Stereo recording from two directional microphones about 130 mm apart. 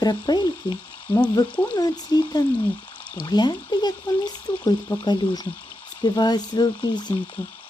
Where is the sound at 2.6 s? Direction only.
10° left (ahead or behind).